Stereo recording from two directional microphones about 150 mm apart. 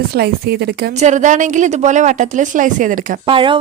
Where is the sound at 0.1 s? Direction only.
90° right.